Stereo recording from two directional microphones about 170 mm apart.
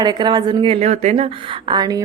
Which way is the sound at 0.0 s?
25° right (ahead or behind).